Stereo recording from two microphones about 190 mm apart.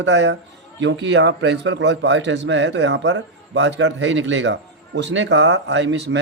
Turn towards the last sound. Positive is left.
turn(degrees=-65)  # may be behind; listen again after turning